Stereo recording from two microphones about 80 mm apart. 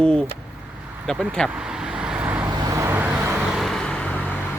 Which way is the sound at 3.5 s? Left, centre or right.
Centre.